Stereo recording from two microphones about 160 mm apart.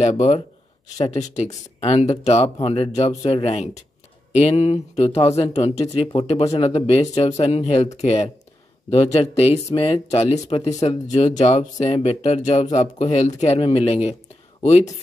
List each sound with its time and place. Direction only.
0.0 s speech: 45° left (ahead or behind)